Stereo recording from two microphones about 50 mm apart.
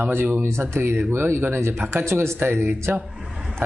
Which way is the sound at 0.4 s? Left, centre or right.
Right.